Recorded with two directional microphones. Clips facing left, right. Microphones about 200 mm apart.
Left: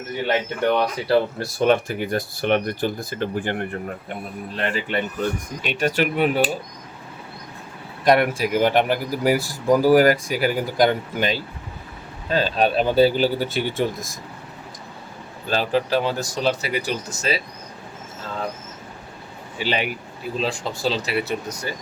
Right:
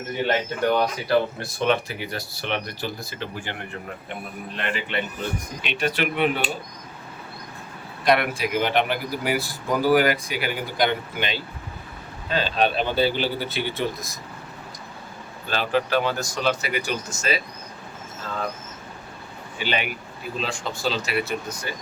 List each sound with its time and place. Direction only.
1.0 s speech: 35° left (ahead or behind); by 3.8 s 50° left (ahead or behind)
4.5 s speech: 40° left (ahead or behind)
8.0 s speech: 45° left (ahead or behind)
15.4 s speech: 35° left (ahead or behind)
19.5 s speech: 35° left (ahead or behind)